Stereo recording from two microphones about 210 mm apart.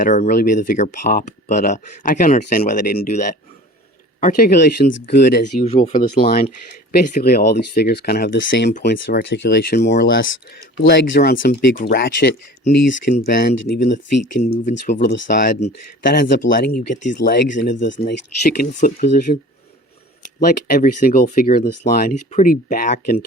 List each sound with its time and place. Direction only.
0.0 s speech: 35° left (ahead or behind)
5.5 s speech: 30° left (ahead or behind)
11.1 s speech: 45° left (ahead or behind)
15.1 s speech: 55° left (ahead or behind)
15.4 s speech: 40° left (ahead or behind)
17.9 s speech: 60° left (ahead or behind)
18.6 s speech: 40° left (ahead or behind)